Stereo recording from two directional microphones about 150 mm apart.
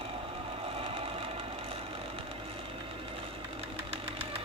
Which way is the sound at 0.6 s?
40° right (ahead or behind).